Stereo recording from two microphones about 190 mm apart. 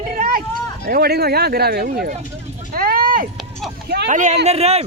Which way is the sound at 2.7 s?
50° right (ahead or behind).